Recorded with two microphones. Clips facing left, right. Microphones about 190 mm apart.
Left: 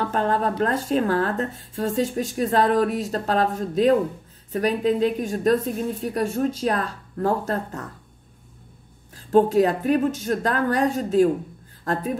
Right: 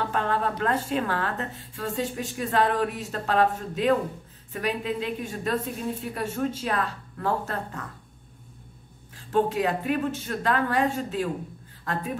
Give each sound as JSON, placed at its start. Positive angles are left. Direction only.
{"t": 0.1, "sound": "speech", "side_deg": 40}
{"t": 9.3, "sound": "speech", "side_deg": 40}